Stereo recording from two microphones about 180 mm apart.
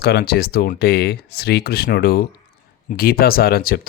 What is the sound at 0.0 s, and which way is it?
Speech, 60° left (ahead or behind).